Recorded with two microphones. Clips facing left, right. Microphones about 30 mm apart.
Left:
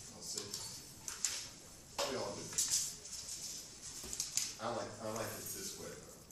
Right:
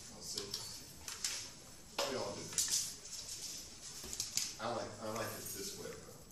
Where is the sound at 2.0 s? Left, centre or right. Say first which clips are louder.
Even; centre.